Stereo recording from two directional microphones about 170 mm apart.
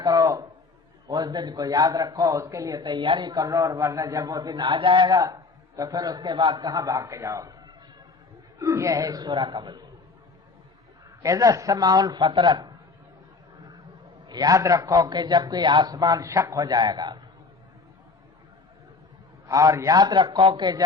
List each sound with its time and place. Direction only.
0.0 s a sound: 20° right (ahead or behind)
1.0 s a man's voice: 25° right (ahead or behind)
8.5 s a man's voice: 20° right (ahead or behind)
11.2 s a man's voice: 20° right (ahead or behind)
14.3 s a man's voice: 20° right (ahead or behind)
19.5 s a man's voice: 20° right (ahead or behind)